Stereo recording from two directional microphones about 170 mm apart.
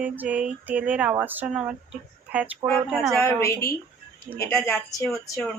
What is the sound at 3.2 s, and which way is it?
Speech, 15° left (ahead or behind).